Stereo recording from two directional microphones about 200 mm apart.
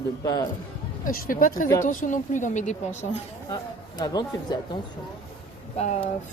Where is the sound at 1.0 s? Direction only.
45° left (ahead or behind).